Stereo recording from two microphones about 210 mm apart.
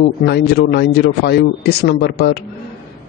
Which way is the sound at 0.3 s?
50° left (ahead or behind).